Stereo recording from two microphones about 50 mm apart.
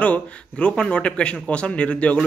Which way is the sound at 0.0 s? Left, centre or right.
Left.